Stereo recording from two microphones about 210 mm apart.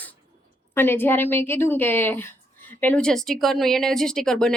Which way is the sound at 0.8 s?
10° left (ahead or behind).